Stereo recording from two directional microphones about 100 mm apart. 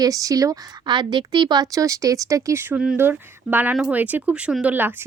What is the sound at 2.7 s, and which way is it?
Speech, 10° right (ahead or behind).